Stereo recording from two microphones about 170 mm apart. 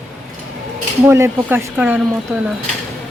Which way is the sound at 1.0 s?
15° right (ahead or behind).